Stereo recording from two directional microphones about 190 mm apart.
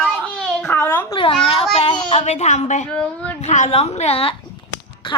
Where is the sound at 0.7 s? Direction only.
10° left (ahead or behind).